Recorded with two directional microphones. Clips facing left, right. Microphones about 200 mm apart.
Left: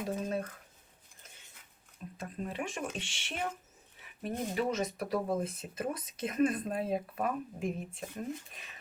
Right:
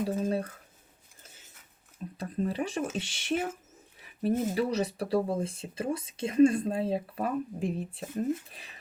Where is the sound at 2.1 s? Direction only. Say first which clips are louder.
Right 7 dB; 35° right (ahead or behind).